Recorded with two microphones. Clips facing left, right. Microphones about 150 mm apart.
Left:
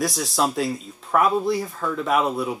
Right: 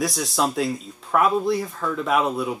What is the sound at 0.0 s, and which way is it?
Speech, centre (ahead or behind).